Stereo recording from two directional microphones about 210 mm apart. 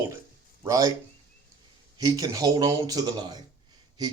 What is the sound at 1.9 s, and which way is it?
Speech, 15° right (ahead or behind).